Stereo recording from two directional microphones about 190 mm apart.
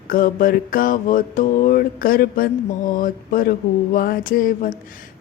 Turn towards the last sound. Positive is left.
turn(degrees=45)  # may be behind; listen again after turning